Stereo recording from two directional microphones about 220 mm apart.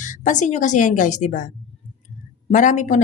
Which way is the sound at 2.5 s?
35° left (ahead or behind).